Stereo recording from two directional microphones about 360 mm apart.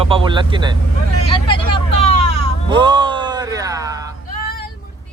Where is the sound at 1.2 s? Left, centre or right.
Centre.